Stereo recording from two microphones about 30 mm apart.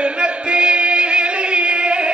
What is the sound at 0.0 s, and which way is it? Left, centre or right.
Music, right.